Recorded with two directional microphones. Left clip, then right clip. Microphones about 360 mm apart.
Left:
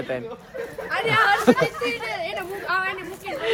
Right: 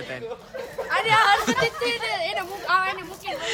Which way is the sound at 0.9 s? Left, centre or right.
Right.